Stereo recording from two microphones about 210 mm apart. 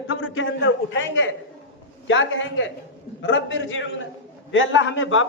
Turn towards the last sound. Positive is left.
turn(degrees=70)  # may be behind; listen again after turning